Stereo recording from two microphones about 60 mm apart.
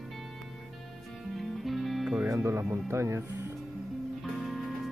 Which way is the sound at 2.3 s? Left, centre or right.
Right.